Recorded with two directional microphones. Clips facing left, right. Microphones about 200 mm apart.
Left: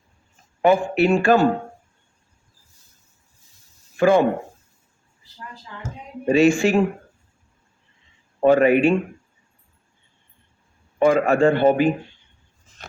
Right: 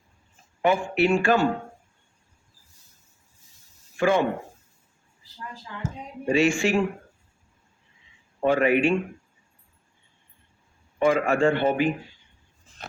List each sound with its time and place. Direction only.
0.6 s a man's voice: 40° left (ahead or behind)
3.9 s speech: 40° left (ahead or behind)
6.2 s a man's voice: 35° left (ahead or behind)
8.4 s a man's voice: 40° left (ahead or behind)
11.0 s a man's voice: 35° left (ahead or behind)